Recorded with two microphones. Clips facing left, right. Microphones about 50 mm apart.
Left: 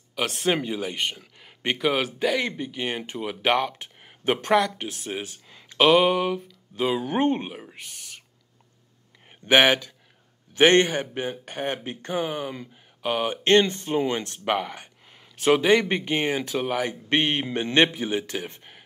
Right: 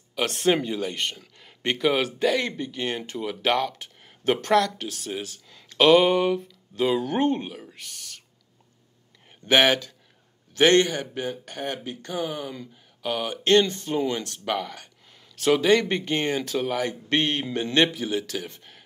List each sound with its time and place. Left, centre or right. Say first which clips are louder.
0.1 s speech: right 2 dB; centre; by 8.2 s left
9.5 s speech: left 1 dB; centre